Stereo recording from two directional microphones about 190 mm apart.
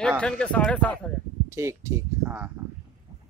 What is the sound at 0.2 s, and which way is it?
Speech, 5° left (ahead or behind).